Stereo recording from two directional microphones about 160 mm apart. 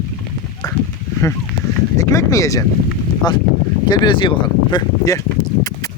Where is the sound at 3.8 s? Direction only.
25° left (ahead or behind).